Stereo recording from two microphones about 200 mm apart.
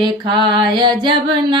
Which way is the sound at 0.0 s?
25° right (ahead or behind).